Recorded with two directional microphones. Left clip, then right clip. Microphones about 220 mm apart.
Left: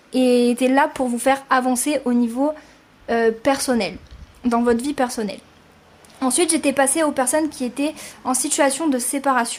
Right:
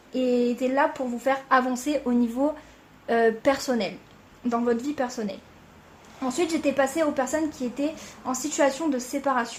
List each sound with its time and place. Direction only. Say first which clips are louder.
0.1 s a woman's voice: left 7 dB; 35° left (ahead or behind)